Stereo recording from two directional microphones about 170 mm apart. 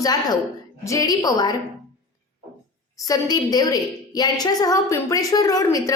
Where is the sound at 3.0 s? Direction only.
20° left (ahead or behind).